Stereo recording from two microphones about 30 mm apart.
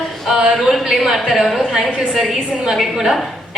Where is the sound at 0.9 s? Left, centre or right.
Centre.